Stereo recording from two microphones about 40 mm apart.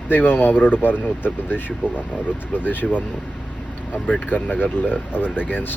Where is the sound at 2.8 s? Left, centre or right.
Centre.